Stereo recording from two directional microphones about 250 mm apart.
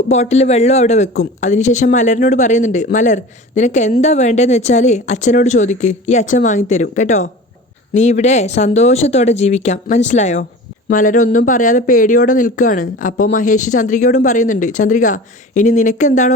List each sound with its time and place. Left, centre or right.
0.1 s a woman's voice: left